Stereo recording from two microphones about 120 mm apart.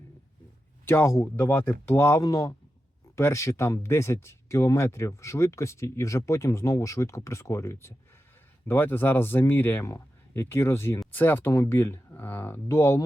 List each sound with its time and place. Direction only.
0.9 s speech: 20° left (ahead or behind)